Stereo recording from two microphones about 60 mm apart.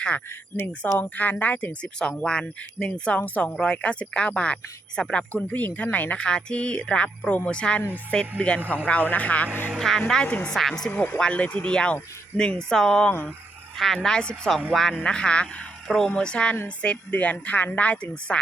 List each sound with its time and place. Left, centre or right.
0.6 s speech: left
2.2 s speech: centre
3.2 s speech: left
5.5 s speech: left
6.1 s speech: centre
9.7 s speech: centre
10.2 s speech: left
10.5 s speech: centre
10.9 s speech: left
11.2 s speech: left
15.9 s speech: centre
16.1 s speech: centre